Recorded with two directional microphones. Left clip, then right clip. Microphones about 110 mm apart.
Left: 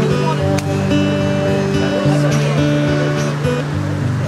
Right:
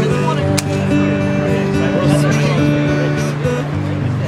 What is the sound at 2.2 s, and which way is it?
Music, 15° left (ahead or behind).